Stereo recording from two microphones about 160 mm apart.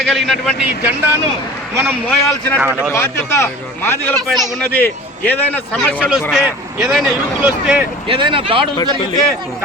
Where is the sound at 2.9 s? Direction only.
15° left (ahead or behind).